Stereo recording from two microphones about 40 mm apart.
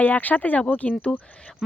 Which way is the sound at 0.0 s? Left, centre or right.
Left.